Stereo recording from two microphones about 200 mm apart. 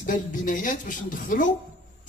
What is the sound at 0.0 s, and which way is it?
A man's voice, 40° left (ahead or behind).